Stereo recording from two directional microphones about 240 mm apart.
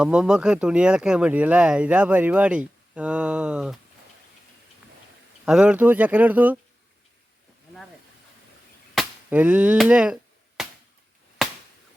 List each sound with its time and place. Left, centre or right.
0.0 s speech: centre
5.5 s speech: centre
9.0 s a sound: centre
11.4 s chop: centre